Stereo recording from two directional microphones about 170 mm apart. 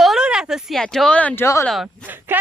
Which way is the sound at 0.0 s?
5° right (ahead or behind).